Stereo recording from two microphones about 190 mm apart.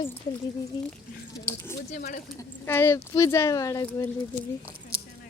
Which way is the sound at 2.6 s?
10° left (ahead or behind).